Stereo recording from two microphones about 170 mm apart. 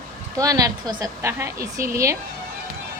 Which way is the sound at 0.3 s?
20° right (ahead or behind).